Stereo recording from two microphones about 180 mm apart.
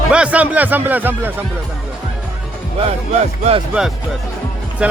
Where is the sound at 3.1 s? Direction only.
35° right (ahead or behind).